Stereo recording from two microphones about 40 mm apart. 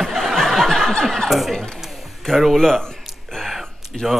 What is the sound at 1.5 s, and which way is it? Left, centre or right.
Speech, centre.